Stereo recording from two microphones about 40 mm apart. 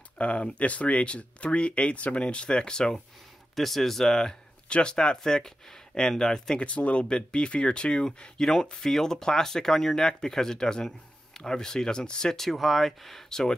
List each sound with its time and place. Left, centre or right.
0.2 s speech: left
3.5 s speech: centre
6.6 s speech: left
12.4 s speech: centre